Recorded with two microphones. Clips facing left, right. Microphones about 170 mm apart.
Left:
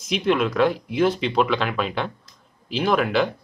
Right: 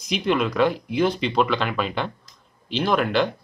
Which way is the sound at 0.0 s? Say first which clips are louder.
Left 1 dB; centre (ahead or behind).